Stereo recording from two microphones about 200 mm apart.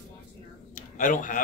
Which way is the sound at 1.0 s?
40° left (ahead or behind).